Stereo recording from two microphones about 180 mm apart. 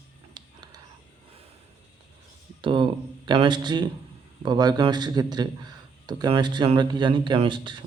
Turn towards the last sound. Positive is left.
turn(degrees=-25)  # may be behind; listen again after turning